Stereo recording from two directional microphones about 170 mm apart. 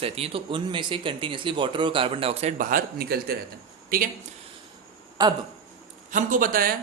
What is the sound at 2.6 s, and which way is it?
Speech, 55° right (ahead or behind).